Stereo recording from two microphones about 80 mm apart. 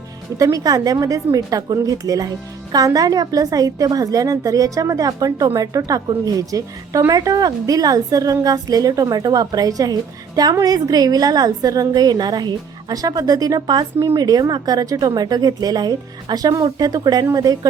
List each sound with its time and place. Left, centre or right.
0.3 s a woman's voice: right